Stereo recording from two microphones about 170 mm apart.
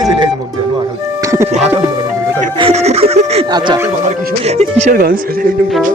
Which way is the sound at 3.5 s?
25° right (ahead or behind).